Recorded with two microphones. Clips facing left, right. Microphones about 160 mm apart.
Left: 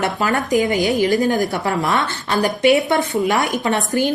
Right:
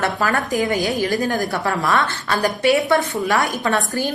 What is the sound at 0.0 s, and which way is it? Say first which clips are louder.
A woman's voice: left 1 dB; 20° left (ahead or behind).